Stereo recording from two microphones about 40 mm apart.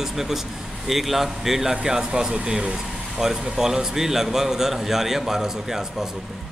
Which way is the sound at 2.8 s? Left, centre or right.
Centre.